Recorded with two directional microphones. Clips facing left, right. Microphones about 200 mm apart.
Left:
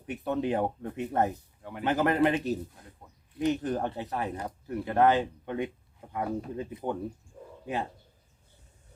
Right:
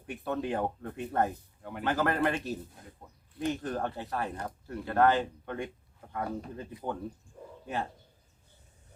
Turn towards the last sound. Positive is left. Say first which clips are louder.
# left 2 dB
turn(degrees=15)  # may be behind; listen again after turning